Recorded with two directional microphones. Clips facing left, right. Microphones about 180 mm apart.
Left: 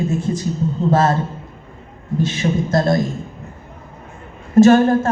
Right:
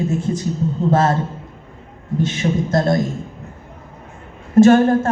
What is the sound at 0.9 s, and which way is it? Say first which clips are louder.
Speech: even; 25° right (ahead or behind).